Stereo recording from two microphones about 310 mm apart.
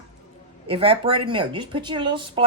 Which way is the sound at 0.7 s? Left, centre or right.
Centre.